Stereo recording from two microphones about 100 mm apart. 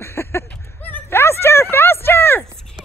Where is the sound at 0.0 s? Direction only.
25° left (ahead or behind).